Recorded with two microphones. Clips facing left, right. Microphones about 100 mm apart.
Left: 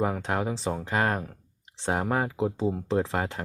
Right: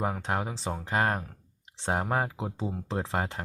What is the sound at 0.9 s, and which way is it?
Speech, 30° right (ahead or behind).